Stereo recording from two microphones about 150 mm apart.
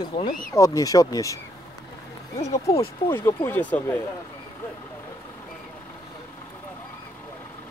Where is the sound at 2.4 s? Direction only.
45° left (ahead or behind).